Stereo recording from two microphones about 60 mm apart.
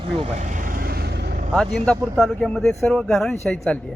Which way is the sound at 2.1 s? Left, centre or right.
Centre.